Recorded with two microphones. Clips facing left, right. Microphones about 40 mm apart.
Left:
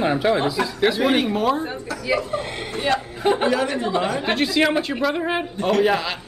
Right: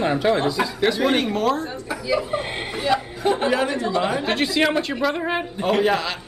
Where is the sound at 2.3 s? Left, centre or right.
Right.